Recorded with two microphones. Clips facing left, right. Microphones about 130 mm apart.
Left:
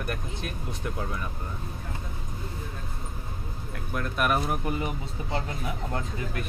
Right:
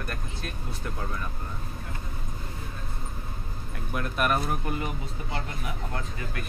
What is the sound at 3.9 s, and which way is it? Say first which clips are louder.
Speech: even; 5° right (ahead or behind).